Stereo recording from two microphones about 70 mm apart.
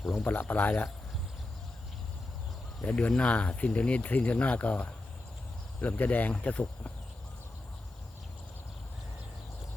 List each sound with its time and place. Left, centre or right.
0.3 s speech: left
2.8 s speech: centre